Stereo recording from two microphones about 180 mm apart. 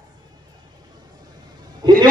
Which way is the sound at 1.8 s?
25° right (ahead or behind).